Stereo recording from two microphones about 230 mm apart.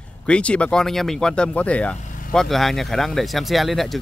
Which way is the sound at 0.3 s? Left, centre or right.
Centre.